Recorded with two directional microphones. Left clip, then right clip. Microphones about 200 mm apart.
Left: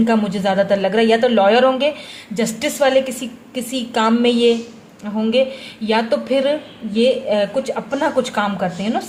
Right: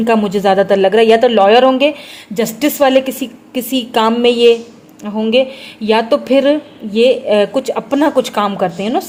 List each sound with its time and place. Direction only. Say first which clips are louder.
0.0 s speech: right 5 dB; 35° right (ahead or behind)